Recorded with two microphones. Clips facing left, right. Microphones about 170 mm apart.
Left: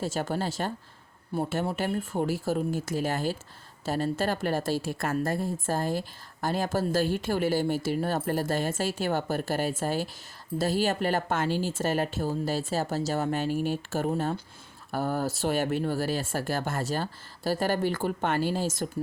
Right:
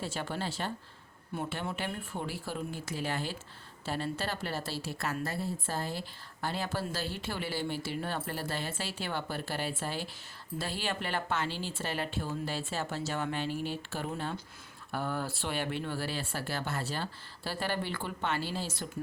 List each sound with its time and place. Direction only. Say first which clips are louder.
0.0 s a woman's voice: left 6 dB; 45° left (ahead or behind)